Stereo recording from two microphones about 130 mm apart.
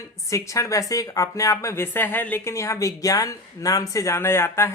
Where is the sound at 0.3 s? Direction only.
25° left (ahead or behind).